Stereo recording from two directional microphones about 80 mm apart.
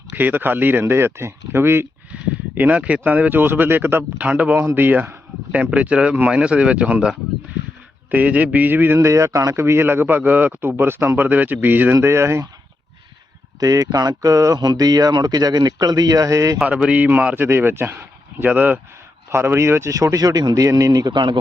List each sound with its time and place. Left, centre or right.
0.1 s a man's voice: right
2.1 s a man's voice: centre
8.1 s a man's voice: centre
9.0 s a man's voice: right
12.0 s speech: right
13.6 s speech: right
16.6 s a man's voice: centre
19.3 s speech: right
21.1 s a man's voice: right